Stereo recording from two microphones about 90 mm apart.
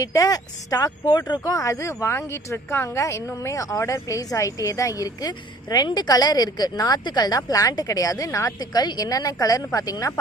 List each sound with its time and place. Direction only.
0.0 s speech: 40° left (ahead or behind)
8.5 s speech: 50° left (ahead or behind)